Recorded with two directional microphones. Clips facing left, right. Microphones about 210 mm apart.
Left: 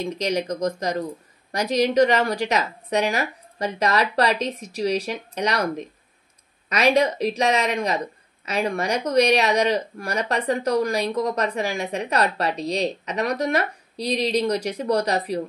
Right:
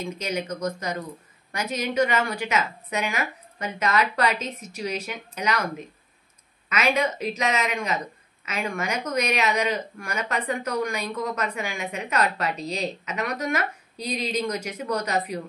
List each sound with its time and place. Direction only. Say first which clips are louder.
0.0 s speech: left 5 dB; 35° left (ahead or behind)
6.7 s speech: left 5 dB; 35° left (ahead or behind)